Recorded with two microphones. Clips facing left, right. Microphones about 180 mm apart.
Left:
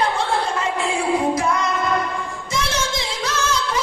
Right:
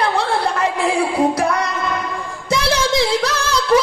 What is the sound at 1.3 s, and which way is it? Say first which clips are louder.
Female singing: right 2 dB; 65° right (ahead or behind).